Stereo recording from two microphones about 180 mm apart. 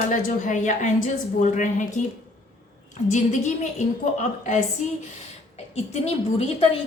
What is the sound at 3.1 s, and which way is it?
A woman's voice, 40° left (ahead or behind).